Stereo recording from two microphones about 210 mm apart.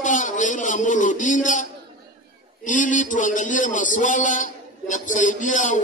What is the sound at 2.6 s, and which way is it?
A man's voice, 40° left (ahead or behind).